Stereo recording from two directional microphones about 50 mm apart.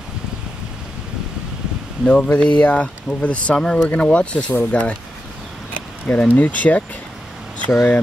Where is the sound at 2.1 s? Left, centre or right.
Left.